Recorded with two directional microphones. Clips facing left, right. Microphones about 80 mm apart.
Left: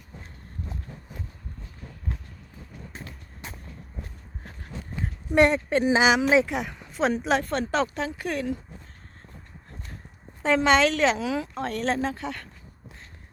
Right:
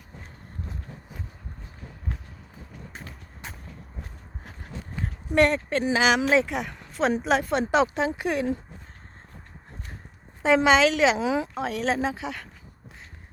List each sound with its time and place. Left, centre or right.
5.6 s speech: centre
6.1 s speech: centre
7.7 s speech: centre
10.4 s speech: centre
11.2 s speech: right
11.5 s speech: centre